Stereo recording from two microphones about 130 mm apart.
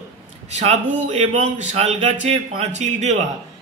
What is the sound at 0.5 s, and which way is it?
A woman's voice, 60° right (ahead or behind).